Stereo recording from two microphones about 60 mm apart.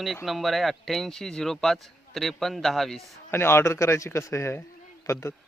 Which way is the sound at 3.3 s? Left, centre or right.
Left.